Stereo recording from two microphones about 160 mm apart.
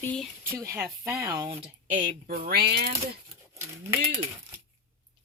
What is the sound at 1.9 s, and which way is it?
Speech, 70° right (ahead or behind).